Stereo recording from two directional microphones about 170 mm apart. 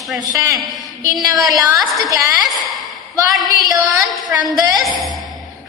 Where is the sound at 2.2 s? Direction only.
Centre (ahead or behind).